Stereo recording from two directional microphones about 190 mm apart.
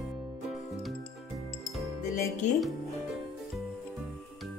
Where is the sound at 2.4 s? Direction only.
40° left (ahead or behind).